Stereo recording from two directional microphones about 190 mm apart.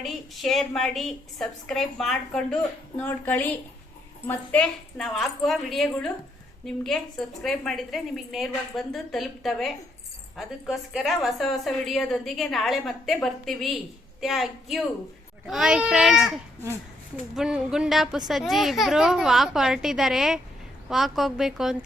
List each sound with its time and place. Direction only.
0.0 s a woman's voice: centre (ahead or behind)